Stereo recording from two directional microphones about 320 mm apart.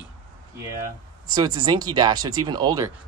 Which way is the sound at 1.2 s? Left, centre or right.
Centre.